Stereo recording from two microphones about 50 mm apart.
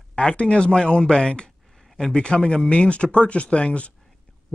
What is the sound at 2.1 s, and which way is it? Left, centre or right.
Speech, centre.